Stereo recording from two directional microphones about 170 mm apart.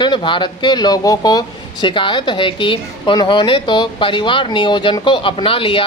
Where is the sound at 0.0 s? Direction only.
30° left (ahead or behind).